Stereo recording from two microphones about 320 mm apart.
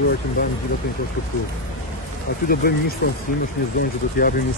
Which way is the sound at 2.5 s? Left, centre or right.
Left.